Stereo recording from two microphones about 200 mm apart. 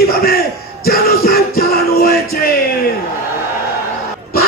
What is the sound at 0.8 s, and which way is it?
Music, 50° left (ahead or behind).